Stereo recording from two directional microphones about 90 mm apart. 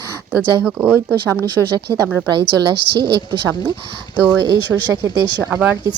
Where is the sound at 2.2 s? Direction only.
60° right (ahead or behind).